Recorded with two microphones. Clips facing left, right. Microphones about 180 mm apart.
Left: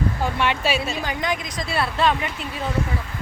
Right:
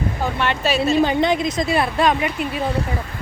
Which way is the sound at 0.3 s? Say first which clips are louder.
Right 2 dB; 10° left (ahead or behind).